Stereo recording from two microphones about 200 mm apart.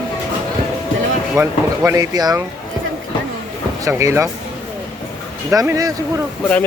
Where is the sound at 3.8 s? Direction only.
15° right (ahead or behind).